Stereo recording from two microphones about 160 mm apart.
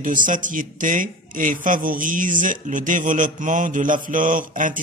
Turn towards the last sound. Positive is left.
turn(degrees=-55)  # may be behind; listen again after turning